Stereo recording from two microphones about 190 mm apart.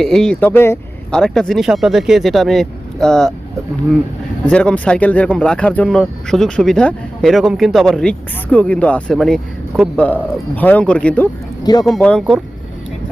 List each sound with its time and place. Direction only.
0.0 s speech: 5° left (ahead or behind)
4.4 s speech: 5° left (ahead or behind)
11.6 s speech: 20° left (ahead or behind)
11.9 s speech: 5° left (ahead or behind)